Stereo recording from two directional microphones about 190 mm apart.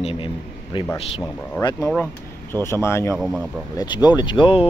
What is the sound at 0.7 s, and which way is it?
Speech, 25° left (ahead or behind).